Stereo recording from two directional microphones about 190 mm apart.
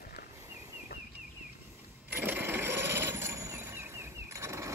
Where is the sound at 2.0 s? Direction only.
10° right (ahead or behind).